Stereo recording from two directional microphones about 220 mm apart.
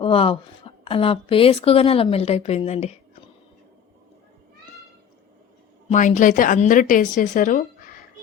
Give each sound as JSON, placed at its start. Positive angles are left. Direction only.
{"t": 0.0, "sound": "speech", "side_deg": 25}
{"t": 5.9, "sound": "speech", "side_deg": 35}